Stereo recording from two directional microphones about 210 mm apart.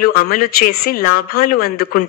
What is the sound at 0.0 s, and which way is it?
A woman's voice, 45° left (ahead or behind).